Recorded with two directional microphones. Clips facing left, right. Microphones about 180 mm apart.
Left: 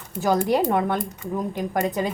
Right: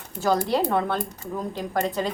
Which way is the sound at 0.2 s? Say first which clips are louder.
Left 2 dB; 15° left (ahead or behind).